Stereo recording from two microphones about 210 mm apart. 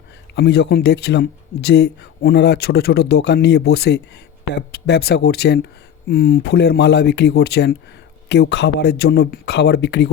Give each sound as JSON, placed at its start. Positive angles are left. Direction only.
{"t": 0.3, "sound": "speech", "side_deg": 50}